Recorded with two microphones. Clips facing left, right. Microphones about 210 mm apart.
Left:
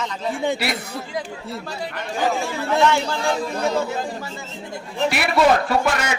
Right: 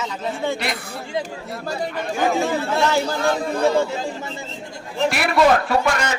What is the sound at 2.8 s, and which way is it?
Speech, 35° right (ahead or behind).